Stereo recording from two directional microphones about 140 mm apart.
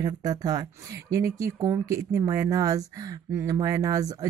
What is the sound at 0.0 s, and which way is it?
Speech, 25° right (ahead or behind).